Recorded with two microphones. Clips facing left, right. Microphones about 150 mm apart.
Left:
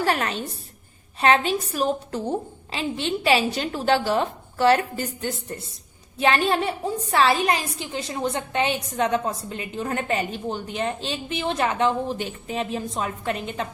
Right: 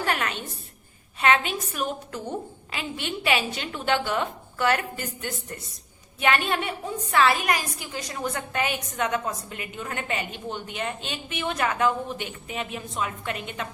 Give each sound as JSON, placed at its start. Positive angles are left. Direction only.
{"t": 0.0, "sound": "a woman's voice", "side_deg": 35}